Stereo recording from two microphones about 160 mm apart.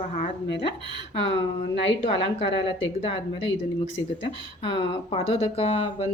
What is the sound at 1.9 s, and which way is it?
Speech, 35° left (ahead or behind).